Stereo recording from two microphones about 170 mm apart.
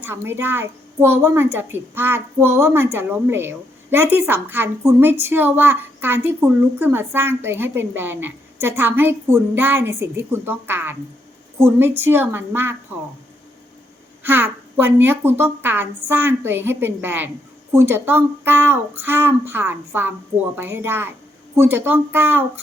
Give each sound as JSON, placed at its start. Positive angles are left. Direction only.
{"t": 0.0, "sound": "a woman's voice", "side_deg": -15}
{"t": 14.3, "sound": "a woman's voice", "side_deg": -15}